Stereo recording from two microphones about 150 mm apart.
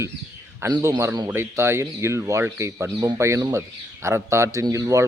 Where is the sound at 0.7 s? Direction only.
20° right (ahead or behind).